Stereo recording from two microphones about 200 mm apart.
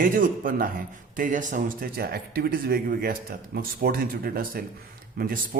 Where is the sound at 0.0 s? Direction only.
45° right (ahead or behind).